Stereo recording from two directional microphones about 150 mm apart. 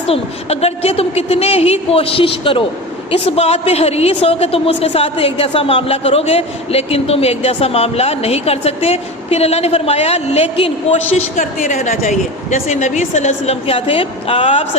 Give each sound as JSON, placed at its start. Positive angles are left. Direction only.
{"t": 0.1, "sound": "a woman's voice", "side_deg": 45}